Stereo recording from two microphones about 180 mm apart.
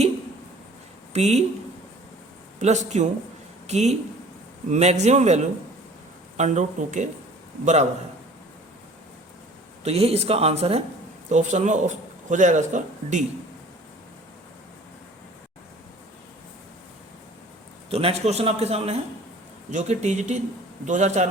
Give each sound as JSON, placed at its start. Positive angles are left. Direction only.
{"t": 1.1, "sound": "speech", "side_deg": -35}
{"t": 2.6, "sound": "speech", "side_deg": -40}
{"t": 9.8, "sound": "a man's voice", "side_deg": -35}
{"t": 17.9, "sound": "speech", "side_deg": -35}